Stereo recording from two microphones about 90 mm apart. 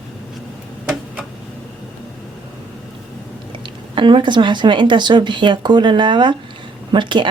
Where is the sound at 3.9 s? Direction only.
65° right (ahead or behind).